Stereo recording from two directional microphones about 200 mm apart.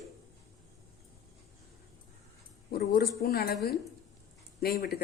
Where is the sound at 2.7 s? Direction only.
50° left (ahead or behind).